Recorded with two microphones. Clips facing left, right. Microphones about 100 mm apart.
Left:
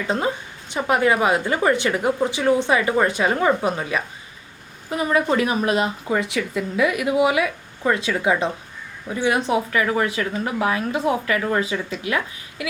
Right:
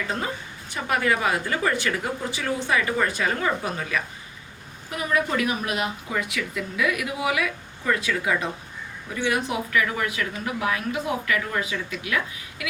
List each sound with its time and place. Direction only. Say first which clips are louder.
0.7 s a woman's voice: left 5 dB; 20° left (ahead or behind)